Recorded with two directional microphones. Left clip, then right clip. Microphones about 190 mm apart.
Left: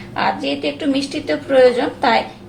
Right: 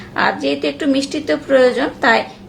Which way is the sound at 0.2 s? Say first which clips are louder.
Right 2 dB; 25° right (ahead or behind).